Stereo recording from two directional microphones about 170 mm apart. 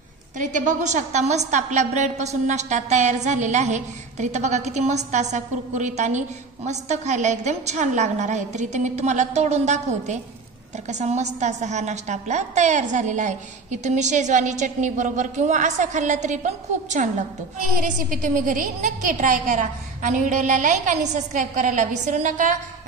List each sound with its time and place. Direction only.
0.4 s a woman's voice: 50° right (ahead or behind)